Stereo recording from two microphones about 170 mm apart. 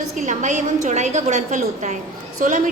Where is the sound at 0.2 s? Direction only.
45° right (ahead or behind).